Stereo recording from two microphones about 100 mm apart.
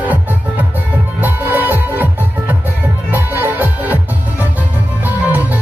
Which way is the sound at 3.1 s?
20° right (ahead or behind).